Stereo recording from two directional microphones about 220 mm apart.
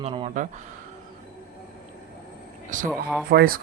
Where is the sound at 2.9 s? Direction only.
5° left (ahead or behind).